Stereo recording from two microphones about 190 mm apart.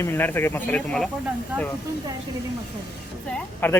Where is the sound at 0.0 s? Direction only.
10° left (ahead or behind).